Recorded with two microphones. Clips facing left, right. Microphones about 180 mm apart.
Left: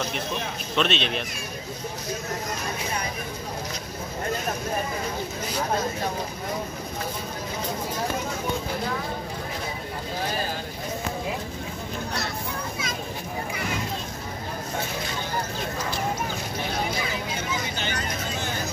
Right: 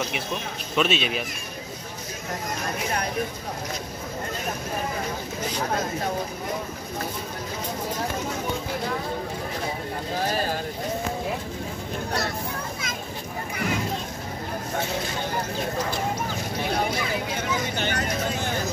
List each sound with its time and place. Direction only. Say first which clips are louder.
0.7 s speech: right 1 dB; 5° right (ahead or behind)
17.7 s vehicle: right 4 dB; 55° right (ahead or behind)